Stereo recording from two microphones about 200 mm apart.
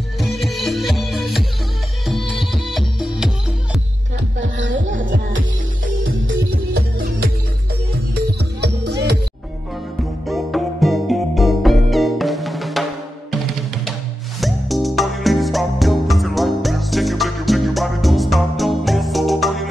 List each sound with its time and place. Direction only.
0.2 s music: centre (ahead or behind)
4.4 s music: 65° right (ahead or behind)
6.7 s music: 50° right (ahead or behind)
8.5 s music: 55° right (ahead or behind)
10.2 s music: centre (ahead or behind)
14.4 s music: centre (ahead or behind)